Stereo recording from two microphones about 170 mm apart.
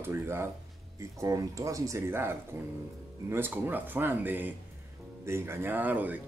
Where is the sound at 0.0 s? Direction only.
15° right (ahead or behind).